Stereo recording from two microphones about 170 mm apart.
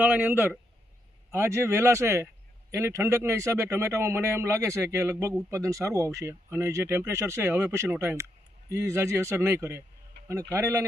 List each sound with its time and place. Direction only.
0.0 s speech: 10° right (ahead or behind)
10.2 s a sound: 80° right
10.5 s speech: 15° right (ahead or behind)